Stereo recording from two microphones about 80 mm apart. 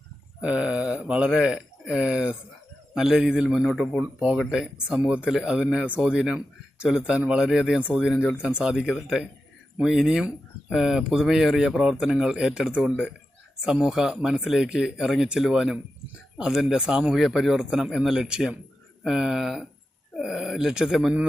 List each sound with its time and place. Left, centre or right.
0.4 s speech: centre
4.0 s speech: centre
7.9 s speech: centre